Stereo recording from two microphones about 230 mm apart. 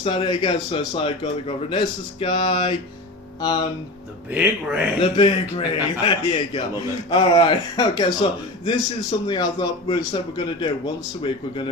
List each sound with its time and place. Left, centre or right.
0.0 s speech: left
4.3 s speech: centre
4.9 s speech: left